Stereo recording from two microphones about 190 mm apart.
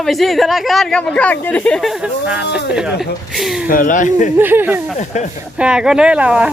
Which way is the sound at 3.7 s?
45° left (ahead or behind).